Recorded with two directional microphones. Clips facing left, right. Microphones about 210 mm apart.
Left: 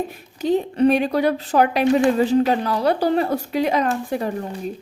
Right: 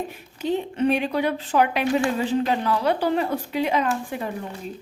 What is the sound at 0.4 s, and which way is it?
A woman's voice, 40° left (ahead or behind).